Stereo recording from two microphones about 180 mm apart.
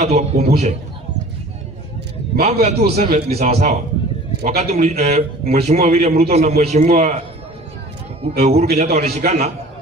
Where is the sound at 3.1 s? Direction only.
35° right (ahead or behind).